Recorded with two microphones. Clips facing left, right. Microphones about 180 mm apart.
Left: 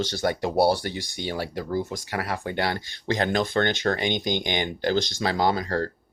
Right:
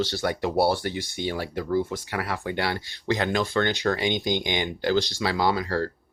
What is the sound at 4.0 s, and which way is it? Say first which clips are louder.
Speech: even; 20° left (ahead or behind).